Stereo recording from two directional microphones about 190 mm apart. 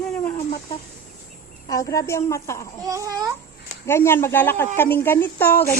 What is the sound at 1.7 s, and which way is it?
Speech, 15° left (ahead or behind).